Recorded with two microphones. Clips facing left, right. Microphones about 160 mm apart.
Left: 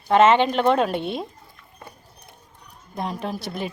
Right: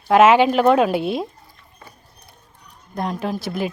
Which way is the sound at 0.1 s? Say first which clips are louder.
Right 3 dB; 5° right (ahead or behind).